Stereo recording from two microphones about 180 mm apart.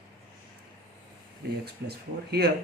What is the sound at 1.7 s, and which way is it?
Speech, 65° right (ahead or behind).